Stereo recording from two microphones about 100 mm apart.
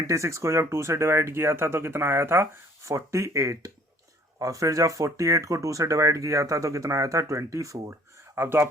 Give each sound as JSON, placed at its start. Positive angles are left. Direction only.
{"t": 0.1, "sound": "speech", "side_deg": -30}